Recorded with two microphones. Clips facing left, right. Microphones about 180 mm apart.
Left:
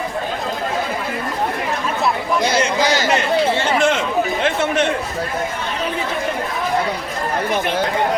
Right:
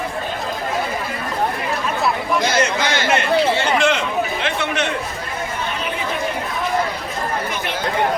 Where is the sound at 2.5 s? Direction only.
30° left (ahead or behind).